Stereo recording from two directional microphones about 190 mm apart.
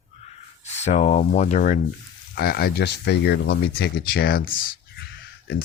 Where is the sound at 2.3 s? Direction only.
55° left (ahead or behind).